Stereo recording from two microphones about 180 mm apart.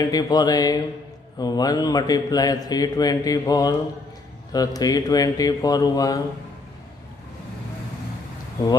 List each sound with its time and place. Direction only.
0.0 s a man's voice: 20° left (ahead or behind)